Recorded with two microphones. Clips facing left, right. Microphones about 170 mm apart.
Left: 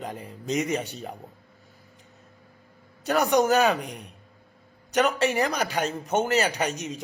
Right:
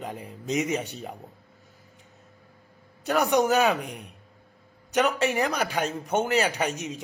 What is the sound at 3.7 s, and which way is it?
Speech, centre (ahead or behind).